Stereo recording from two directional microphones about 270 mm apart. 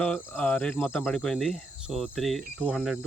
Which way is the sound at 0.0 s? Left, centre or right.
Centre.